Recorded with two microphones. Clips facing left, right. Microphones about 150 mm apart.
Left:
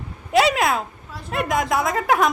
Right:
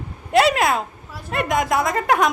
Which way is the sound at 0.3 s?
Centre (ahead or behind).